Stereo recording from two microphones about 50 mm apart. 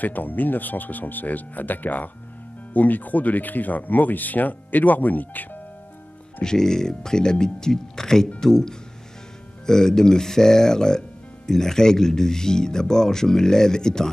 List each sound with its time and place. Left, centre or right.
0.0 s speech: left
6.4 s speech: centre